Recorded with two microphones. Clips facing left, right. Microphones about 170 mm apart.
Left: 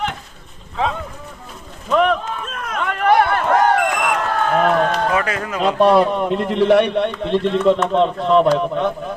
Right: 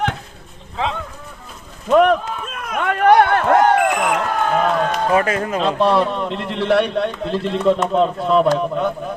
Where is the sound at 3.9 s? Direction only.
15° right (ahead or behind).